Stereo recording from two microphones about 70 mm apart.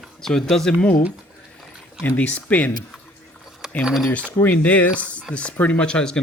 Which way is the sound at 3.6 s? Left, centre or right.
Centre.